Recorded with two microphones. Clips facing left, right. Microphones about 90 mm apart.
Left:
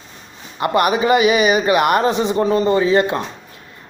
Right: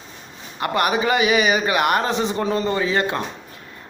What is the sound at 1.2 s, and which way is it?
Speech, 5° left (ahead or behind).